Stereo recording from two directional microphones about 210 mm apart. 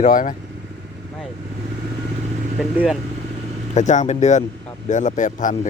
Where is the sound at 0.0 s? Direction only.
40° left (ahead or behind).